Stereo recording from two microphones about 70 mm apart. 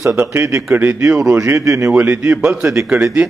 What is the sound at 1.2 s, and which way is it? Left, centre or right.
Speech, right.